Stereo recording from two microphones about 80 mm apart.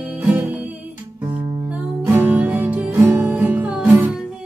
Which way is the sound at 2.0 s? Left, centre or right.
Right.